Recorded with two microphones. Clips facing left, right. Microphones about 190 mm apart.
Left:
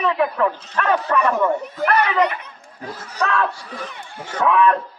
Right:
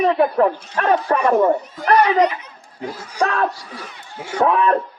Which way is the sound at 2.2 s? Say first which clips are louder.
Right 3 dB; 55° left (ahead or behind).